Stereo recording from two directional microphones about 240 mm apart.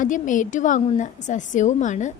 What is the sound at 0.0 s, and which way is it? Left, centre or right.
A woman's voice, left.